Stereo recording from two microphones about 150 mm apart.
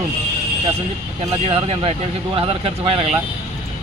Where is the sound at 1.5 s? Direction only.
40° right (ahead or behind).